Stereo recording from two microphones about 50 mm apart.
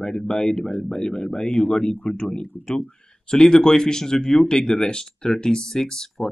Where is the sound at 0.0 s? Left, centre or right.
Centre.